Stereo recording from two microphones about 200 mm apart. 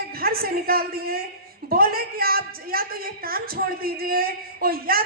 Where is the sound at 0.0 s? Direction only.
50° right (ahead or behind).